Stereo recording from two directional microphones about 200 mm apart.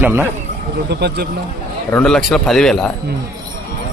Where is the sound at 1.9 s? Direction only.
5° left (ahead or behind).